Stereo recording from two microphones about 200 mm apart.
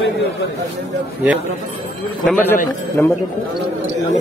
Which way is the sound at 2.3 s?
10° left (ahead or behind).